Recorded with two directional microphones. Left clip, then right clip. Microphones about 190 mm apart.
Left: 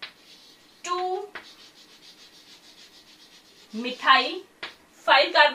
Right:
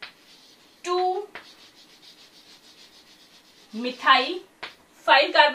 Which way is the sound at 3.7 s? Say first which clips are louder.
Even; centre (ahead or behind).